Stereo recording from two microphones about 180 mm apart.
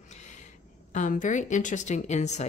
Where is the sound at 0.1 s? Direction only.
40° left (ahead or behind).